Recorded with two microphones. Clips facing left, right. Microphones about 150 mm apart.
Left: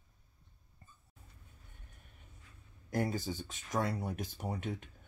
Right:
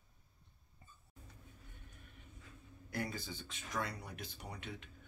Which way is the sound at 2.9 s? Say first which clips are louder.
Left 7 dB; 45° left (ahead or behind).